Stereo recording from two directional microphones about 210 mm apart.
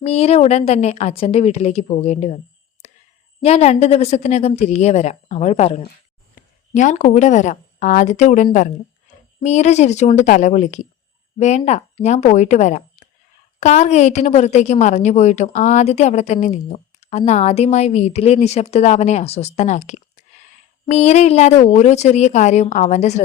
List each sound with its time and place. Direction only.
0.0 s a woman's voice: 30° left (ahead or behind)
3.4 s a woman's voice: 30° left (ahead or behind)